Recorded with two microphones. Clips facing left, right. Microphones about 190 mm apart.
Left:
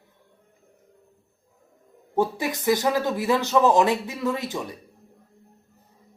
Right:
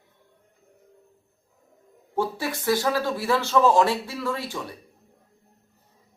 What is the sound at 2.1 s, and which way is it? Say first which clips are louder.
Speech: left 3 dB; 15° left (ahead or behind).